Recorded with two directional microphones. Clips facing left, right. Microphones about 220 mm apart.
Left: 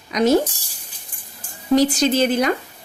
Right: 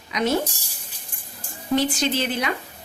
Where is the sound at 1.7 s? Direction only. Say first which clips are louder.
Left 6 dB; 40° left (ahead or behind).